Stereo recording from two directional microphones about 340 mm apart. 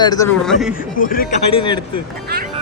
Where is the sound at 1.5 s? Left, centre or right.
Centre.